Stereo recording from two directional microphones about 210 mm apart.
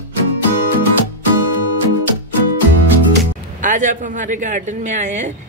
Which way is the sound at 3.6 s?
35° right (ahead or behind).